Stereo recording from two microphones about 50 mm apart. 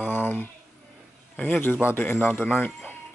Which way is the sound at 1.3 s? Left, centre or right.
Left.